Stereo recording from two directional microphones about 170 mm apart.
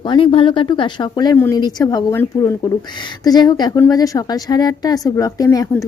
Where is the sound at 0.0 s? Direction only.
30° left (ahead or behind).